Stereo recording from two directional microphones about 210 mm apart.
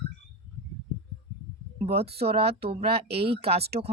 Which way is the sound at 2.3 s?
30° right (ahead or behind).